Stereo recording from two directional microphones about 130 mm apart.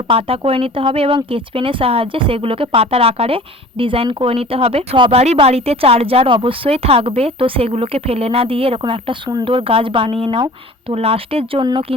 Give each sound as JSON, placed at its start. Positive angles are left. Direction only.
{"t": 0.1, "sound": "speech", "side_deg": -45}